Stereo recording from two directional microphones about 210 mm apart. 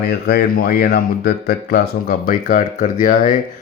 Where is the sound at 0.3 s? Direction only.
50° left (ahead or behind).